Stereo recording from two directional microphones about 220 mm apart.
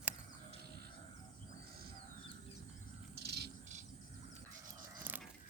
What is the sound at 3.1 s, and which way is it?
Bird, 50° right (ahead or behind).